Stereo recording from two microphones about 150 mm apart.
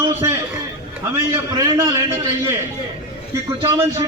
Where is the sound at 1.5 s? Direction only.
25° right (ahead or behind).